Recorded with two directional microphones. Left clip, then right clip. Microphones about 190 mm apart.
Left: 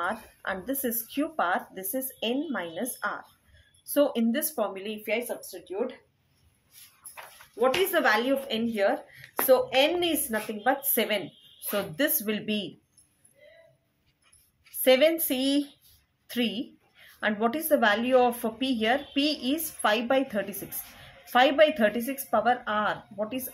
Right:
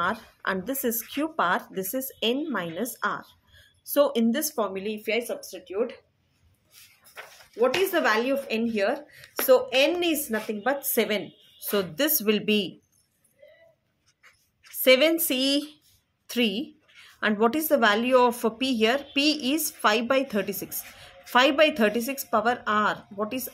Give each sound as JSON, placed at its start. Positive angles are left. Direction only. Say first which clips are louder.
{"t": 0.0, "sound": "a woman's voice", "louder": "right 4 dB", "side_deg": -35}
{"t": 7.6, "sound": "a woman's voice", "louder": "right 1 dB", "side_deg": -15}
{"t": 11.7, "sound": "a woman's voice", "louder": "right 2 dB", "side_deg": -40}
{"t": 14.8, "sound": "a woman's voice", "louder": "right 2 dB", "side_deg": -35}